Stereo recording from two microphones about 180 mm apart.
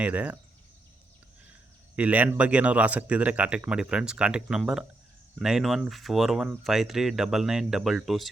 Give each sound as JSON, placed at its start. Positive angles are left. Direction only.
{"t": 0.0, "sound": "speech", "side_deg": -5}
{"t": 2.0, "sound": "speech", "side_deg": -10}